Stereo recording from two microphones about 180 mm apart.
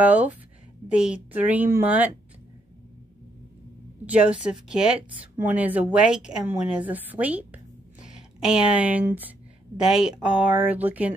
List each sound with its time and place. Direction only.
0.0 s speech: 10° right (ahead or behind)
4.0 s a woman's voice: 5° right (ahead or behind)